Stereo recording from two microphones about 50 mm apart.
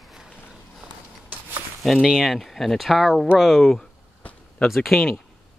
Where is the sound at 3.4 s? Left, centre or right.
Centre.